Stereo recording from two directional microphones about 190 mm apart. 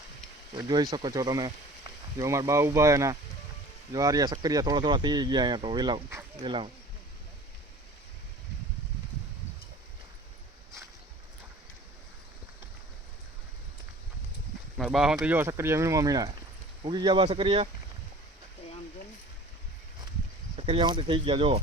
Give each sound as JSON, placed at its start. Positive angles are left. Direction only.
{"t": 0.5, "sound": "speech", "side_deg": -20}
{"t": 14.8, "sound": "speech", "side_deg": -5}
{"t": 20.6, "sound": "speech", "side_deg": -25}